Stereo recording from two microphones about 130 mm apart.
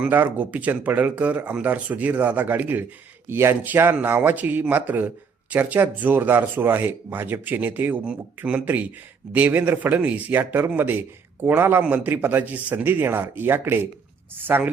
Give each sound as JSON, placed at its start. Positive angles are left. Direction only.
{"t": 0.0, "sound": "a man's voice", "side_deg": -15}